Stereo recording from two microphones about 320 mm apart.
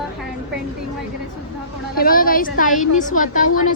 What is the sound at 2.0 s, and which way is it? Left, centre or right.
A woman's voice, left.